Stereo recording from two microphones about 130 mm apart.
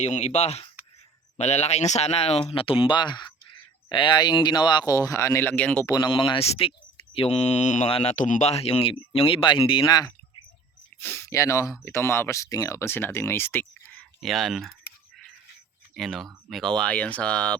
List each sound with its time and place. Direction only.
0.0 s speech: 60° left (ahead or behind); by 5.8 s 10° left (ahead or behind)
5.8 s speech: 30° left (ahead or behind); by 7.9 s 65° left (ahead or behind)
7.9 s speech: 50° left (ahead or behind)
8.1 s speech: 75° left (ahead or behind); by 10.1 s 30° left (ahead or behind)
11.0 s speech: 20° left (ahead or behind)
13.9 s a sound: centre (ahead or behind)
16.0 s speech: centre (ahead or behind)